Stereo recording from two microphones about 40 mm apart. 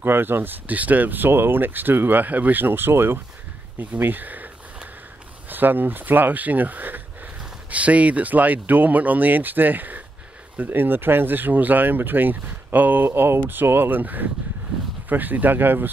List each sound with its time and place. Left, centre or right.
0.0 s speech: right
4.0 s speech: right
5.5 s speech: right
7.7 s speech: right
10.7 s speech: right
13.0 s speech: right